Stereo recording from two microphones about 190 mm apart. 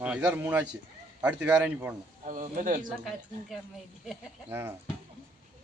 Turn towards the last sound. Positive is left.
turn(degrees=-15)  # may be behind; listen again after turning